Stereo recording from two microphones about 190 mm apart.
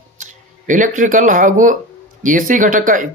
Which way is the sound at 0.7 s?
45° right (ahead or behind).